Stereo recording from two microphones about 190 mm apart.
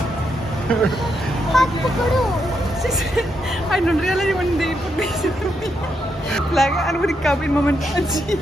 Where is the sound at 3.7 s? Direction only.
Centre (ahead or behind).